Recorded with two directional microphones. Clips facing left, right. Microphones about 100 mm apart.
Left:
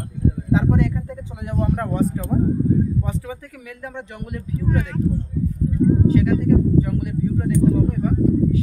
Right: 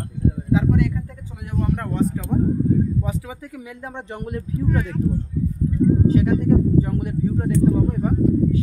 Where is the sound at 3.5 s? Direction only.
25° right (ahead or behind).